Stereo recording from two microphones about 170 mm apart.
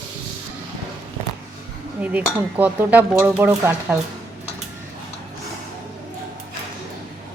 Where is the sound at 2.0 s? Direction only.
10° right (ahead or behind).